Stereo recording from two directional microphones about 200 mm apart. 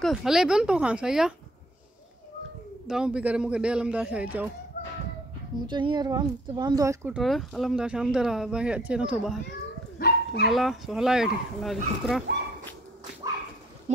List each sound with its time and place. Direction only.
0.0 s speech: centre (ahead or behind)
2.9 s speech: 5° right (ahead or behind)
5.7 s speech: 25° right (ahead or behind)
7.2 s speech: centre (ahead or behind)
9.9 s dog: 50° left (ahead or behind)
10.5 s speech: centre (ahead or behind)
13.9 s speech: 35° right (ahead or behind)